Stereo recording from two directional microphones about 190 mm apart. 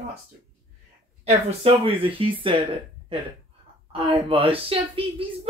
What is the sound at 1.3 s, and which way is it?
Speech, 30° right (ahead or behind).